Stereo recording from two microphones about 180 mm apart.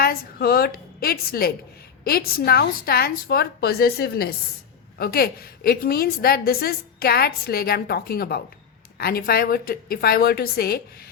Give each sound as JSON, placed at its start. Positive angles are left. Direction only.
{"t": 0.0, "sound": "a woman's voice", "side_deg": 60}